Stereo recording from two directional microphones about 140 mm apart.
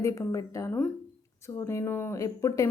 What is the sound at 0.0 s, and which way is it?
Speech, 20° left (ahead or behind).